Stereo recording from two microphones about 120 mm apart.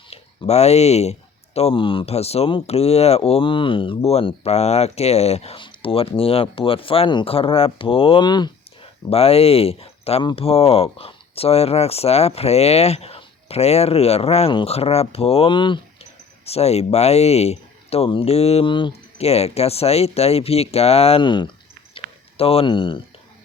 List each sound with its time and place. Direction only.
0.1 s speech: 65° left (ahead or behind); by 8.4 s 40° left (ahead or behind)
9.0 s speech: 55° left (ahead or behind)
16.5 s speech: 60° left (ahead or behind)
18.7 s speech: 40° left (ahead or behind)
19.2 s speech: 60° left (ahead or behind); by 21.5 s 40° left (ahead or behind)
21.9 s a sound: 55° left (ahead or behind)